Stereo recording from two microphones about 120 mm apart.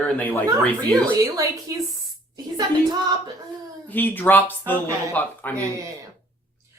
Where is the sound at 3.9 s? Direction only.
15° left (ahead or behind).